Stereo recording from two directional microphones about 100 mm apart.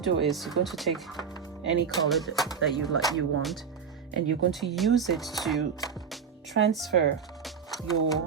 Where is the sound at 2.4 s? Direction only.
40° left (ahead or behind).